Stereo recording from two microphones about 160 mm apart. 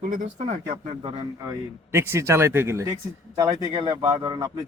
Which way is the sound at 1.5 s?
15° right (ahead or behind).